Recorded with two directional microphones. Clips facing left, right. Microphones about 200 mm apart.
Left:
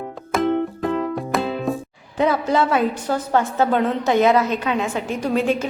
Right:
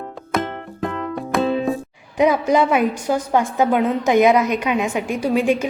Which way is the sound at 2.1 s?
15° right (ahead or behind).